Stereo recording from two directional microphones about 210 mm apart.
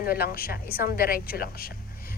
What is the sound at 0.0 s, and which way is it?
A woman's voice, 45° left (ahead or behind).